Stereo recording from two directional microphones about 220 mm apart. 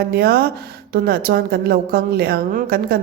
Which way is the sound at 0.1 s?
45° right (ahead or behind).